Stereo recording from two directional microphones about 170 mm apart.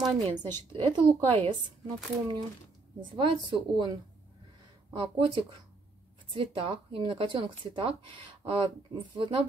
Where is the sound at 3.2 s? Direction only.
30° right (ahead or behind).